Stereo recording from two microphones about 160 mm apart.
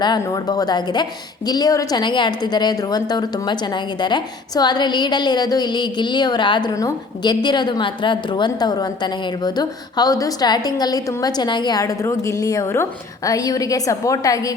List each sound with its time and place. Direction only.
0.0 s a woman's voice: 25° left (ahead or behind)